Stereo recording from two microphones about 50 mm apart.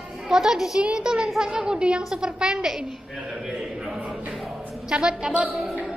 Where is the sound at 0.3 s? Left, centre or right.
Centre.